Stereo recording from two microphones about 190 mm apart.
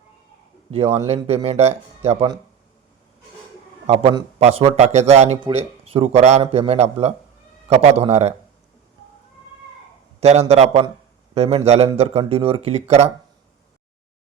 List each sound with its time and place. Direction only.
0.7 s a man's voice: 35° right (ahead or behind)
3.8 s a man's voice: 30° right (ahead or behind)
10.2 s a man's voice: 35° right (ahead or behind)